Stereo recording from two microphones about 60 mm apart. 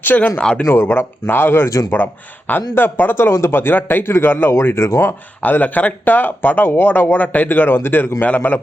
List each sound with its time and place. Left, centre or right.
0.0 s speech: left
0.3 s speech: centre
0.6 s speech: left
5.4 s speech: left